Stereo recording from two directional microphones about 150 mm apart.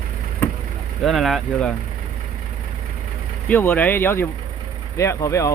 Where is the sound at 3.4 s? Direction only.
10° left (ahead or behind).